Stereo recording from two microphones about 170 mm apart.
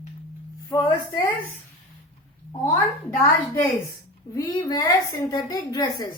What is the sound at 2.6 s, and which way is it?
A woman's voice, 15° left (ahead or behind).